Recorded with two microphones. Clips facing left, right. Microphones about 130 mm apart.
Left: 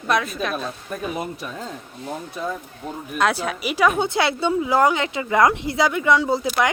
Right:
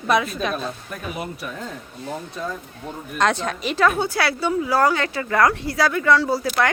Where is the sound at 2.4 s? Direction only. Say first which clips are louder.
Left 1 dB; 10° left (ahead or behind).